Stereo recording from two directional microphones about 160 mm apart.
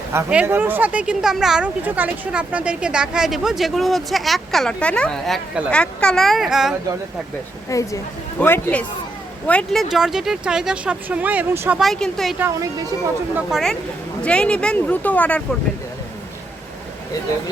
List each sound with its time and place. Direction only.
0.1 s speech: 10° right (ahead or behind)
7.7 s a woman's voice: 20° left (ahead or behind); by 11.8 s 15° right (ahead or behind)
11.8 s speech: centre (ahead or behind)